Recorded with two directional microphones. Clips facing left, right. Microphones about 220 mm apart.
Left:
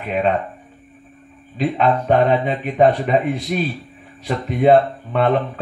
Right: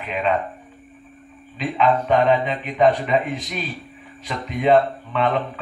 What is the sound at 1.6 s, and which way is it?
Speech, 40° left (ahead or behind).